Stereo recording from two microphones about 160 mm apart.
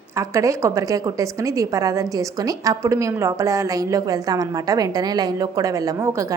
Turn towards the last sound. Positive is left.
turn(degrees=-20)  # may be behind; listen again after turning